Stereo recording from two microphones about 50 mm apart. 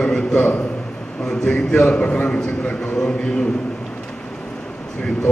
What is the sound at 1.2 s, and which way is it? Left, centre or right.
A man's voice, centre.